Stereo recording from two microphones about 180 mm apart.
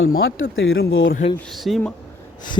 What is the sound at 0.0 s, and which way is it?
Speech, 75° left (ahead or behind).